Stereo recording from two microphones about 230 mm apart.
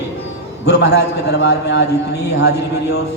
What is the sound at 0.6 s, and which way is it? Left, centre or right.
A man's voice, left.